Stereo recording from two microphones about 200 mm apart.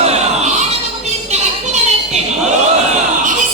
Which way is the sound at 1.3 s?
35° right (ahead or behind).